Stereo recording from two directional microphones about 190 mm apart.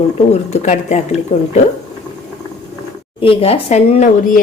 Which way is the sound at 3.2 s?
30° left (ahead or behind).